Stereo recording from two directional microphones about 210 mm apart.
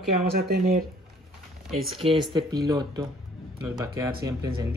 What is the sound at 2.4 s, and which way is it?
Speech, 20° right (ahead or behind).